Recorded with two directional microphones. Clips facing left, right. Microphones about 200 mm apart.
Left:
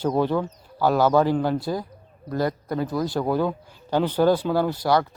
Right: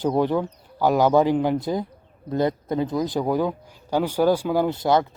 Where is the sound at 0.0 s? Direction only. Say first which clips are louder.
Right 1 dB; 15° right (ahead or behind).